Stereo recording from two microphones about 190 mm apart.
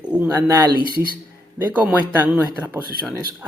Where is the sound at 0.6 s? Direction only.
20° right (ahead or behind).